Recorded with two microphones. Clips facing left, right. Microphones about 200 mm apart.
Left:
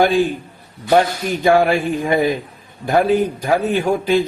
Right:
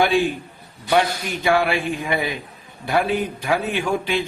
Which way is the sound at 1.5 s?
40° left (ahead or behind).